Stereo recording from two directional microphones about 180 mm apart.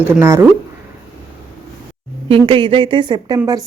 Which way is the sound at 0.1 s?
15° right (ahead or behind).